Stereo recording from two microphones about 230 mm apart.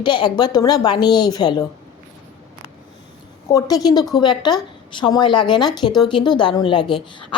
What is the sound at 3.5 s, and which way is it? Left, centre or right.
A woman's voice, centre.